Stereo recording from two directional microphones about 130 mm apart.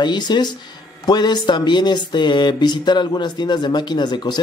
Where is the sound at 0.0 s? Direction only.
35° left (ahead or behind).